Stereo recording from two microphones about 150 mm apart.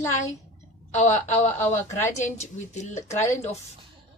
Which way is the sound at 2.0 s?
55° left (ahead or behind).